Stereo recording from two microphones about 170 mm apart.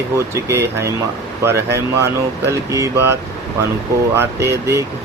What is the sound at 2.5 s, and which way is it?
Speech, 20° right (ahead or behind).